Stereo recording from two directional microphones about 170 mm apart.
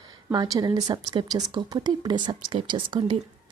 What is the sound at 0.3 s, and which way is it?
Speech, 20° right (ahead or behind).